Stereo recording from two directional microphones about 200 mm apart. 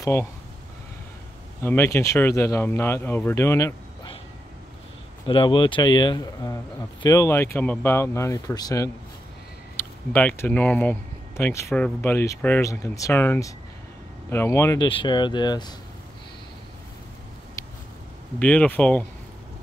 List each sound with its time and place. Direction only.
0.0 s speech: 15° left (ahead or behind)
1.6 s speech: 10° left (ahead or behind)
5.2 s speech: 25° left (ahead or behind)
18.4 s speech: 5° left (ahead or behind)